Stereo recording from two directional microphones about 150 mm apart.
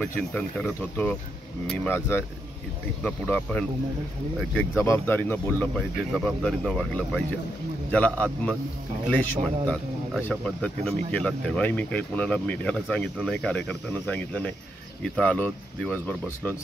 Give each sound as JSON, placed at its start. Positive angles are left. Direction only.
{"t": 0.0, "sound": "speech", "side_deg": 10}
{"t": 4.7, "sound": "speech", "side_deg": 15}
{"t": 5.8, "sound": "speech", "side_deg": 0}